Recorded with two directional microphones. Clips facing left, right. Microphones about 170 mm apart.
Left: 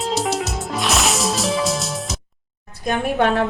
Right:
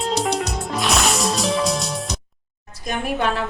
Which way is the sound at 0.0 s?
Centre (ahead or behind).